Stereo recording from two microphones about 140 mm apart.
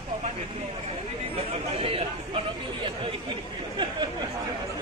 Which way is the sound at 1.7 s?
40° right (ahead or behind).